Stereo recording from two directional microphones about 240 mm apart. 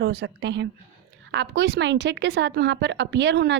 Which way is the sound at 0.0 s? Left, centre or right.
Right.